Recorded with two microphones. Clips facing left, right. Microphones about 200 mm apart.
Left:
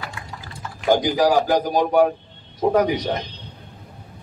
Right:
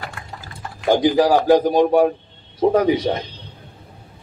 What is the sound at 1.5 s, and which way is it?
Speech, 25° right (ahead or behind).